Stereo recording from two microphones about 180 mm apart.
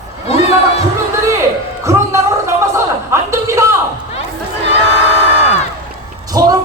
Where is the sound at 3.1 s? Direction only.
15° right (ahead or behind).